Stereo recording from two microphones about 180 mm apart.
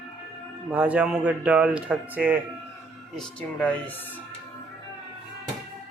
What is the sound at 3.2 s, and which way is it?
Speech, 5° left (ahead or behind).